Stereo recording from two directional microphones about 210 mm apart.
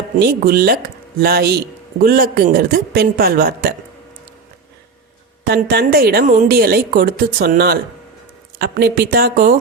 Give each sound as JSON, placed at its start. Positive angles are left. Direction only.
{"t": 0.2, "sound": "a man's voice", "side_deg": -45}
{"t": 5.5, "sound": "a man's voice", "side_deg": -45}